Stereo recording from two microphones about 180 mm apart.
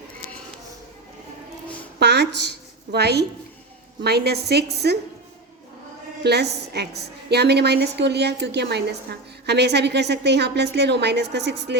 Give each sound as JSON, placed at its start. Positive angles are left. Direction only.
{"t": 2.0, "sound": "a woman's voice", "side_deg": -70}
{"t": 6.2, "sound": "a woman's voice", "side_deg": -65}